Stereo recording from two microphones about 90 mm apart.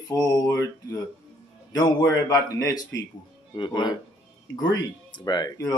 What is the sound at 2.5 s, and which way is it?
Speech, 35° left (ahead or behind).